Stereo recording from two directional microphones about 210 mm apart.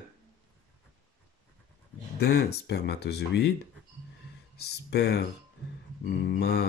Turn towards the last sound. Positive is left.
turn(degrees=50)  # may be behind; listen again after turning